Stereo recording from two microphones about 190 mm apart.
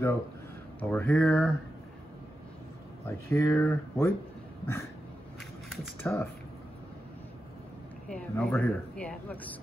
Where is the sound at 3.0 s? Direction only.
15° left (ahead or behind).